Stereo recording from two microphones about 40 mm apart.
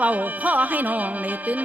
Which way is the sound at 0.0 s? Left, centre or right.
Right.